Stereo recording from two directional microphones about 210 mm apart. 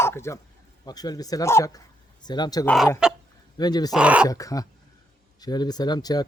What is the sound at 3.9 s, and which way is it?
Speech, 5° right (ahead or behind).